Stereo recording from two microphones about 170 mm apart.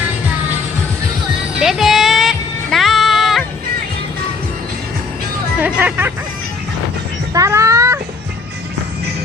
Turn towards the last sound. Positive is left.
turn(degrees=-15)  # may be behind; listen again after turning